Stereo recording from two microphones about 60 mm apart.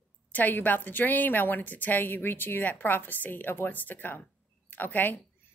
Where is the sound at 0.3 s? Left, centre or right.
Left.